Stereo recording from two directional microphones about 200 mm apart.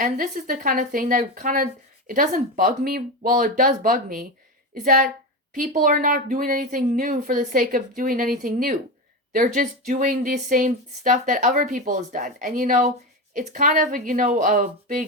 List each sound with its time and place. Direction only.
0.0 s speech: 45° right (ahead or behind)